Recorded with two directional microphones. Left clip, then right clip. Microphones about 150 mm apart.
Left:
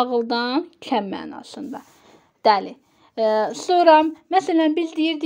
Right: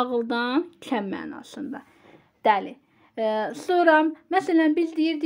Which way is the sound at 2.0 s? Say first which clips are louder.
Left 4 dB; 35° left (ahead or behind).